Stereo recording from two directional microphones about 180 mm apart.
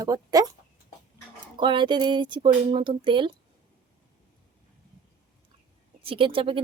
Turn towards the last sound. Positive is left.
turn(degrees=-30)  # may be behind; listen again after turning